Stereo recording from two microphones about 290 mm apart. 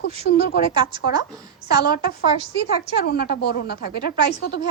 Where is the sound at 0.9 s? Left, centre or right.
Centre.